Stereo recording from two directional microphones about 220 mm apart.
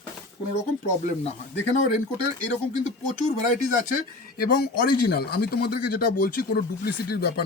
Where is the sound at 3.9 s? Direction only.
40° left (ahead or behind).